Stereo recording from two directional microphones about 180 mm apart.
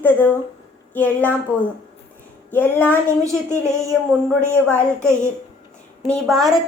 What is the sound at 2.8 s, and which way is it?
A woman's voice, 15° right (ahead or behind).